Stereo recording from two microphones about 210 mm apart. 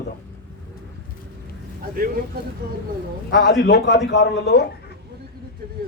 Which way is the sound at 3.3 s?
50° left (ahead or behind).